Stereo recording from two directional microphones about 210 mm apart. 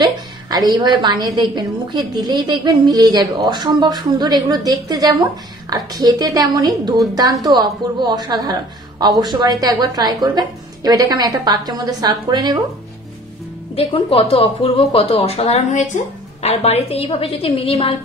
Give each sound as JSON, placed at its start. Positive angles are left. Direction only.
{"t": 0.0, "sound": "a woman's voice", "side_deg": -20}
{"t": 13.7, "sound": "speech", "side_deg": 25}